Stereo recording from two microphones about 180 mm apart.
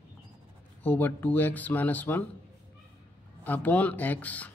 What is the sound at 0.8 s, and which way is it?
Speech, 10° left (ahead or behind).